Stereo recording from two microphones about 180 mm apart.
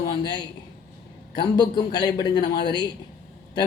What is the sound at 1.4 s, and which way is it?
Speech, 25° left (ahead or behind).